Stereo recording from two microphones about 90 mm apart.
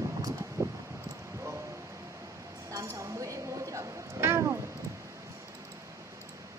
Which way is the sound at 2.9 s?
35° right (ahead or behind).